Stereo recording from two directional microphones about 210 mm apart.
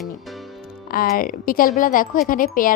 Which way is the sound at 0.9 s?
45° left (ahead or behind).